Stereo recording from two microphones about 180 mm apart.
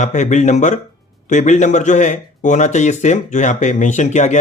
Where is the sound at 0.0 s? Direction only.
40° left (ahead or behind).